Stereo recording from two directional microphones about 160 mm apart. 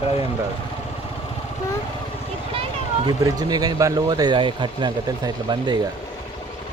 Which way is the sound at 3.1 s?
25° right (ahead or behind).